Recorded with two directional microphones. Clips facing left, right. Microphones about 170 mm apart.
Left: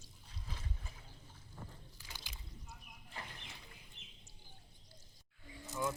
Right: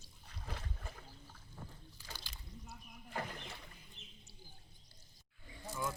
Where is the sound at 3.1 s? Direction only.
55° right (ahead or behind).